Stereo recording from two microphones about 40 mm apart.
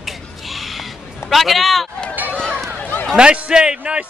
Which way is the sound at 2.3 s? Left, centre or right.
Left.